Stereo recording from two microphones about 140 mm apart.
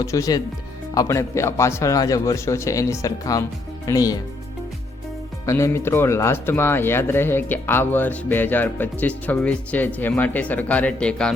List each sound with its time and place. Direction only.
0.0 s speech: 25° left (ahead or behind)
5.5 s speech: 20° left (ahead or behind)